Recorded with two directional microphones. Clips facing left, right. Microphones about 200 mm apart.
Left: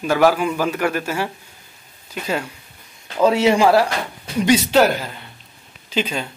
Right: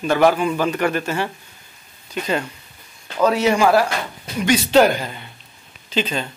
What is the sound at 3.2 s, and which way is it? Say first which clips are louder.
Speech: left 2 dB; 25° left (ahead or behind).